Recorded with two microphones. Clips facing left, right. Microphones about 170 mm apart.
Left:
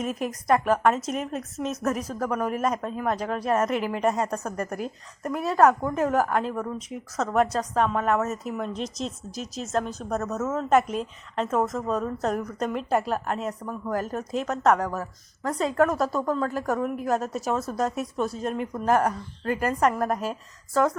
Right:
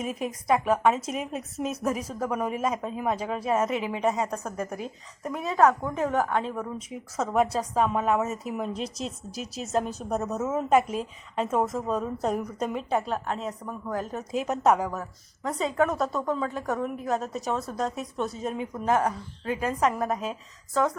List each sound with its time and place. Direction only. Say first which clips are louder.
0.0 s speech: left 2 dB; centre (ahead or behind)
14.4 s a woman's voice: even; 15° right (ahead or behind)